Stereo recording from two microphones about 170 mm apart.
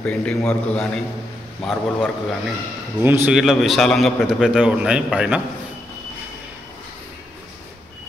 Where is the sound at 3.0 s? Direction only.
10° right (ahead or behind).